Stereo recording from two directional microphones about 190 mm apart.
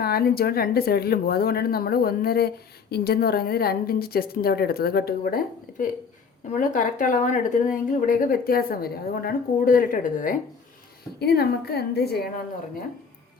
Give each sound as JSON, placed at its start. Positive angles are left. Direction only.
{"t": 0.0, "sound": "a woman's voice", "side_deg": 55}
{"t": 6.5, "sound": "a woman's voice", "side_deg": 40}
{"t": 11.2, "sound": "a woman's voice", "side_deg": 55}